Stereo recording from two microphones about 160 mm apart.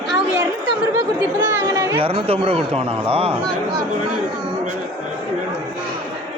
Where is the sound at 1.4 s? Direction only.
15° right (ahead or behind).